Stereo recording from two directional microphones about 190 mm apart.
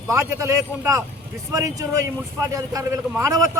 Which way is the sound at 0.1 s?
15° right (ahead or behind).